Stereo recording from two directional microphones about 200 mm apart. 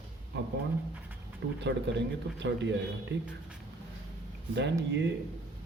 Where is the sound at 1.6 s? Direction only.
60° right (ahead or behind).